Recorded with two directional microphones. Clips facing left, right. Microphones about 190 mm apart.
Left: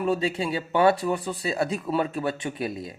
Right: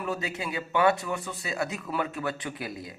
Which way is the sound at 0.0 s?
30° left (ahead or behind).